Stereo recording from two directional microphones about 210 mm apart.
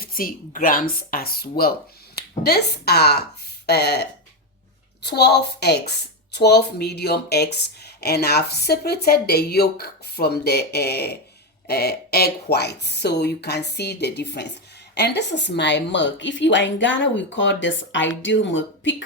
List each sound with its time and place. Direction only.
0.0 s a woman's voice: 45° left (ahead or behind); by 19.0 s 60° left (ahead or behind)